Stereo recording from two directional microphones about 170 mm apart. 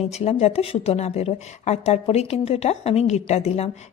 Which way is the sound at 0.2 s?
40° left (ahead or behind).